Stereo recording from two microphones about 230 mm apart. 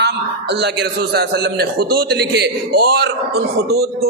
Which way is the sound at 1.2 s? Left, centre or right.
Right.